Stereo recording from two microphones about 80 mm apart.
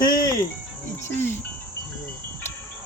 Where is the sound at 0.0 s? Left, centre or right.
Left.